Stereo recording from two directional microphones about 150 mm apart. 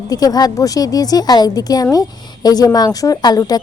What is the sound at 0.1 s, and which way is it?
A woman's voice, 25° left (ahead or behind).